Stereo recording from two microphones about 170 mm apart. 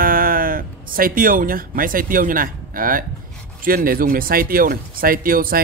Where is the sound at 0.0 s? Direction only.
55° right (ahead or behind).